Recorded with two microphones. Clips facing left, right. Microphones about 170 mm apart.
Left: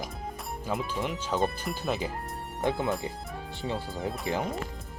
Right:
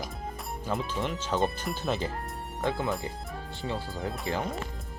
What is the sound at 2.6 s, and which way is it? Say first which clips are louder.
Speech: left 2 dB; 20° left (ahead or behind).